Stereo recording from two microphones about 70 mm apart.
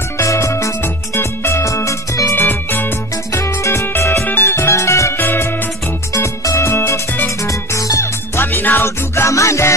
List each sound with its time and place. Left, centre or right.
0.2 s music: left
2.3 s music: left
5.1 s music: left
7.4 s music: left
8.4 s music: left